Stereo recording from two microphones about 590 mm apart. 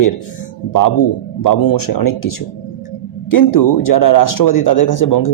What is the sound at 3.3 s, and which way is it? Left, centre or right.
A man's voice, left.